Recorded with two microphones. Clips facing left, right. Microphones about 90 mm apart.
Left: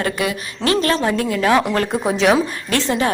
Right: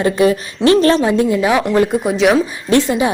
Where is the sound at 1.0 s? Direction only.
20° right (ahead or behind).